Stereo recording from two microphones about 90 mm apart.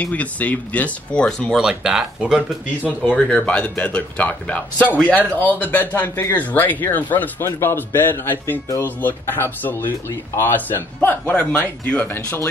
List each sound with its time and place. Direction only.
0.0 s a man's voice: 15° left (ahead or behind)
1.5 s speech: 5° right (ahead or behind)
2.8 s a man's voice: 15° left (ahead or behind)